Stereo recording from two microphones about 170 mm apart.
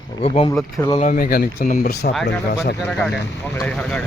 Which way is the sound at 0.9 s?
50° left (ahead or behind).